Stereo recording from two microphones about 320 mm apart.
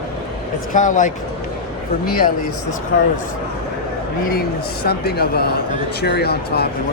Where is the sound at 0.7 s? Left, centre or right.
Left.